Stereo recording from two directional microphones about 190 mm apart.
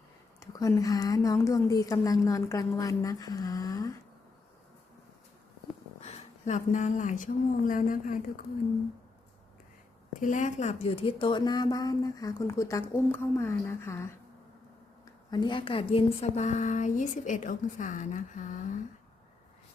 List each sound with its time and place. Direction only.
0.3 s speech: 20° left (ahead or behind)
6.0 s speech: 35° left (ahead or behind)
10.2 s speech: 40° left (ahead or behind); by 14.1 s 15° left (ahead or behind)
15.3 s speech: 25° left (ahead or behind); by 18.7 s 40° left (ahead or behind)